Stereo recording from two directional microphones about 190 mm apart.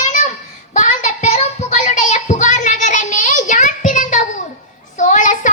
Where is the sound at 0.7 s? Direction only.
40° left (ahead or behind).